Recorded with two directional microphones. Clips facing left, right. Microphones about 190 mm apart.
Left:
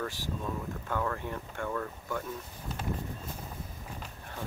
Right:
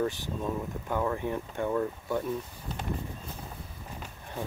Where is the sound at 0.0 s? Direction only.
20° right (ahead or behind).